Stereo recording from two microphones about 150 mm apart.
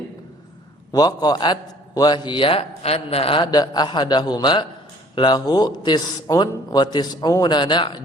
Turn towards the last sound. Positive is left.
turn(degrees=30)  # may be behind; listen again after turning